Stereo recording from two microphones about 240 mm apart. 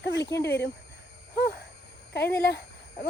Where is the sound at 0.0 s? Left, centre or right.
Left.